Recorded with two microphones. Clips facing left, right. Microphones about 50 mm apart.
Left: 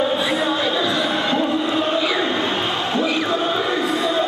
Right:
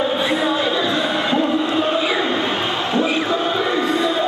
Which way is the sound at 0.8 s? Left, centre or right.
Centre.